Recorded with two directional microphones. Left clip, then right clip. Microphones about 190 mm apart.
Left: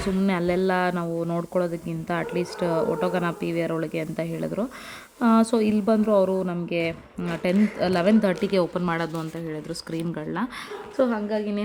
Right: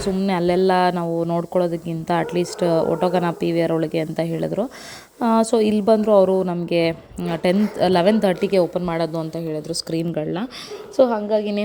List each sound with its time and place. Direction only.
0.3 s speech: centre (ahead or behind)
10.9 s a woman's voice: 15° left (ahead or behind)